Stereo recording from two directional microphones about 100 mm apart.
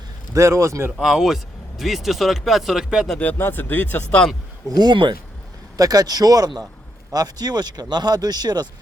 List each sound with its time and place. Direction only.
0.3 s speech: 30° right (ahead or behind)
0.9 s speech: 5° right (ahead or behind)
3.2 s speech: 20° left (ahead or behind)
4.7 s speech: 45° right (ahead or behind)
5.7 s speech: 40° right (ahead or behind)